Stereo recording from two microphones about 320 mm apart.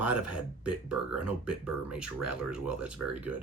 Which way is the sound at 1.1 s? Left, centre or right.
Centre.